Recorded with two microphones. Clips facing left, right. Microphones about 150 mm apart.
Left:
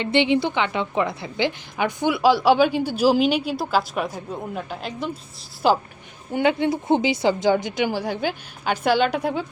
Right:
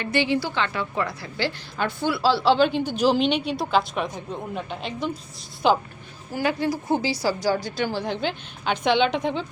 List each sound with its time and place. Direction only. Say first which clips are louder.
0.0 s a woman's voice: left 4 dB; 20° left (ahead or behind); by 5.8 s 5° left (ahead or behind)
6.3 s a woman's voice: left 4 dB; 20° left (ahead or behind); by 9.5 s 5° left (ahead or behind)